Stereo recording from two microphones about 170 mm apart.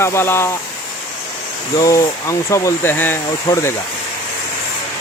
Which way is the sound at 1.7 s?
20° left (ahead or behind).